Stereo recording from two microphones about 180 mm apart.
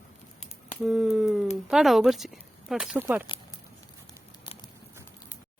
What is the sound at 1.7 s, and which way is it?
Speech, centre (ahead or behind).